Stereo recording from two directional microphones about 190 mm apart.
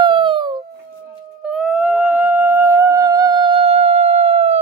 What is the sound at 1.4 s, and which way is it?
Music, 5° right (ahead or behind).